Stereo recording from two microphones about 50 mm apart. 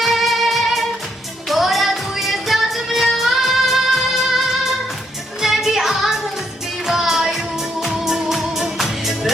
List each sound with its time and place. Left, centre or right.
0.0 s music: centre
5.4 s music: centre